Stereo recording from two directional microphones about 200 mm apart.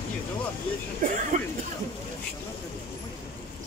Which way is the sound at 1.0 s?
40° right (ahead or behind).